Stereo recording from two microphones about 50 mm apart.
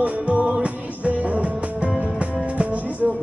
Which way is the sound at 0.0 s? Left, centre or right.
Right.